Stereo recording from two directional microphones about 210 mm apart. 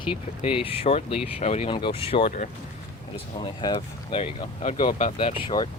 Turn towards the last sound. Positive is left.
turn(degrees=25)  # may be behind; listen again after turning